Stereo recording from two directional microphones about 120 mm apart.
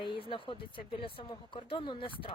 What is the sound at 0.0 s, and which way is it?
Speech, 45° left (ahead or behind).